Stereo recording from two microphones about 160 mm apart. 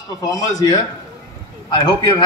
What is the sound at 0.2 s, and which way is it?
A man's voice, 25° left (ahead or behind).